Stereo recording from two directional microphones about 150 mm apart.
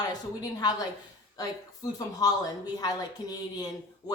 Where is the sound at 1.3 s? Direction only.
25° left (ahead or behind).